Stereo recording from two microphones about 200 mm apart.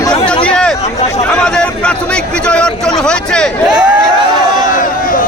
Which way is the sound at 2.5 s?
5° left (ahead or behind).